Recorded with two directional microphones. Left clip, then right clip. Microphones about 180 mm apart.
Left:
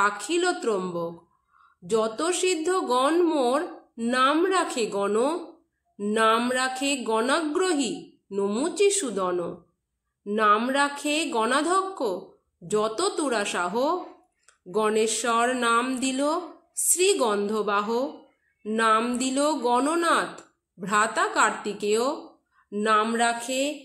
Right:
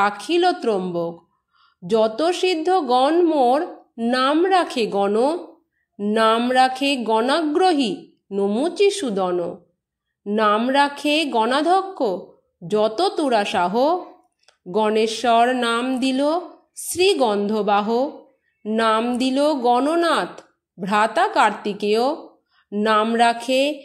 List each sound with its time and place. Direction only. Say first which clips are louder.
0.0 s speech: right 5 dB; 30° right (ahead or behind)
18.6 s a sound: right 4 dB; 20° right (ahead or behind)
18.9 s speech: right 3 dB; 25° right (ahead or behind)